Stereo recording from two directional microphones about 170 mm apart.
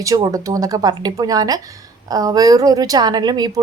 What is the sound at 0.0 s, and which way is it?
A woman's voice, 20° right (ahead or behind).